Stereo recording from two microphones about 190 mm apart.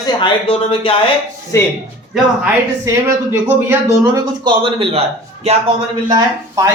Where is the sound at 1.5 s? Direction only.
15° left (ahead or behind).